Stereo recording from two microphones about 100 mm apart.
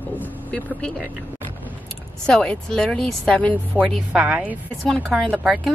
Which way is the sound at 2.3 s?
10° left (ahead or behind).